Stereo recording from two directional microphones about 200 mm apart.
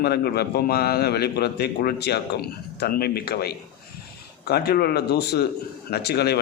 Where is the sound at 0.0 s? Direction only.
55° left (ahead or behind).